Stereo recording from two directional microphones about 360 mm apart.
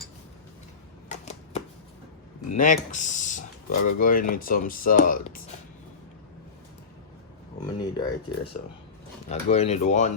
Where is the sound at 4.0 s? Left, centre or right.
Left.